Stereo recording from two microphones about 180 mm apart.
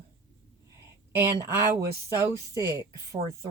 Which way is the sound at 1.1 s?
15° right (ahead or behind).